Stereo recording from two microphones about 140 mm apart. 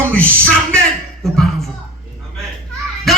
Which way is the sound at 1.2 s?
Centre (ahead or behind).